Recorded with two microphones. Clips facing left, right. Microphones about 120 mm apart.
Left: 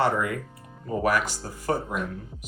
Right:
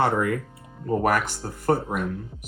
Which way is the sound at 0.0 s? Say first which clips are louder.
Right 2 dB; 45° right (ahead or behind).